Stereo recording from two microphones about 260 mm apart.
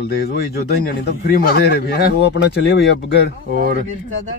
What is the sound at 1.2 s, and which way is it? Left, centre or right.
Speech, left.